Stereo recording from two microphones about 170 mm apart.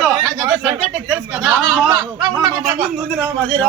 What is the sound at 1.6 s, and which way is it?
Speech, 20° right (ahead or behind).